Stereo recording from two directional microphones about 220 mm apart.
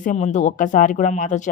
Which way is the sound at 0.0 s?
35° left (ahead or behind).